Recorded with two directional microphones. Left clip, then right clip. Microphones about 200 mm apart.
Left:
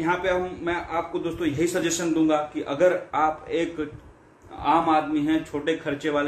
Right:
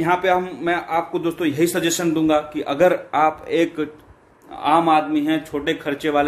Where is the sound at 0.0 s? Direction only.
55° right (ahead or behind).